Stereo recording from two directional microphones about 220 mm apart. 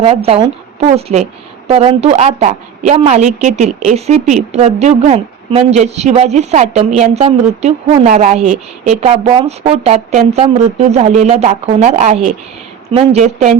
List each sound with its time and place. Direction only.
0.0 s a woman's voice: 25° right (ahead or behind)